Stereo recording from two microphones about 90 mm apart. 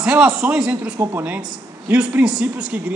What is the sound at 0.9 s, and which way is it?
Speech, 35° right (ahead or behind).